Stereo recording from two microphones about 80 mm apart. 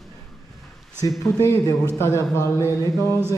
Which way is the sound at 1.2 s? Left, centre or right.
Left.